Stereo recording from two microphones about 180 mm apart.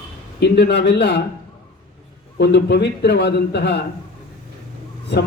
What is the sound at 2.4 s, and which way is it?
A man's voice, 65° left (ahead or behind).